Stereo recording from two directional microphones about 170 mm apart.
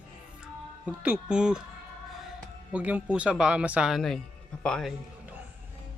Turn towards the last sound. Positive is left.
turn(degrees=5)  # may be behind; listen again after turning